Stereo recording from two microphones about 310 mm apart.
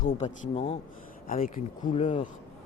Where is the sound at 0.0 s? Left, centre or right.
Left.